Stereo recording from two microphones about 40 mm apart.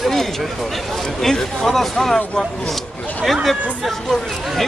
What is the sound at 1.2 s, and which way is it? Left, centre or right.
Speech, centre.